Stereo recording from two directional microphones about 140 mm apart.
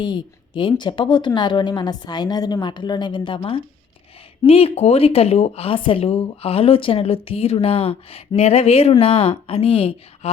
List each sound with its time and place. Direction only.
0.0 s a woman's voice: 35° left (ahead or behind)